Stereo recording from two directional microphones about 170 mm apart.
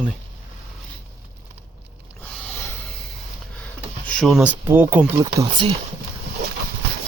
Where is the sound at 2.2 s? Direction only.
10° left (ahead or behind); by 5.1 s 10° right (ahead or behind).